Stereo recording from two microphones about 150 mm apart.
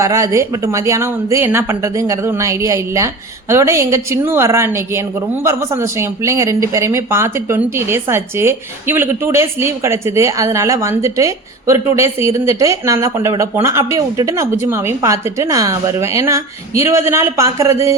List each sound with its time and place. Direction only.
0.0 s a woman's voice: 20° right (ahead or behind)